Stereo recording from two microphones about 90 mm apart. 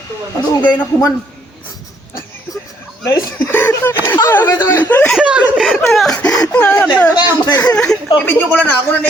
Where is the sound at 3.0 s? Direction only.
30° left (ahead or behind).